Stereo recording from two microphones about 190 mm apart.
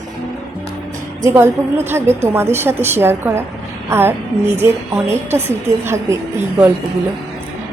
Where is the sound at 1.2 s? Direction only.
10° right (ahead or behind).